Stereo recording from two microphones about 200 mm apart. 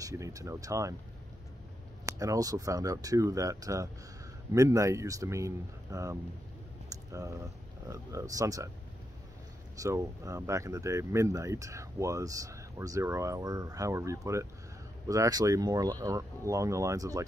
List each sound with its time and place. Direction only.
0.0 s speech: 15° right (ahead or behind)
2.0 s speech: 15° right (ahead or behind)
6.9 s a sound: 15° right (ahead or behind)
7.9 s speech: 15° right (ahead or behind)
9.8 s speech: 15° right (ahead or behind)